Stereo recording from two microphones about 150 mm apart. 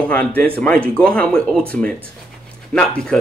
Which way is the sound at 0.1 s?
10° left (ahead or behind).